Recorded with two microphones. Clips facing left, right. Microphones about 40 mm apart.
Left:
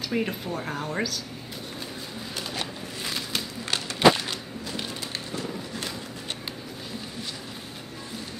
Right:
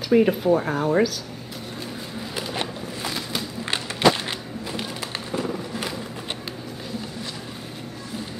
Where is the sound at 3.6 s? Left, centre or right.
Right.